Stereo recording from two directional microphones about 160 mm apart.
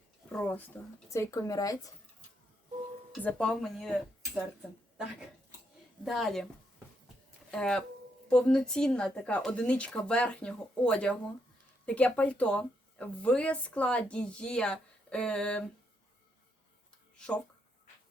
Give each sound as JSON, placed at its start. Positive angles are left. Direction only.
{"t": 0.3, "sound": "speech", "side_deg": 10}
{"t": 3.2, "sound": "speech", "side_deg": 10}
{"t": 6.1, "sound": "speech", "side_deg": 0}
{"t": 7.5, "sound": "speech", "side_deg": 5}
{"t": 17.2, "sound": "speech", "side_deg": 5}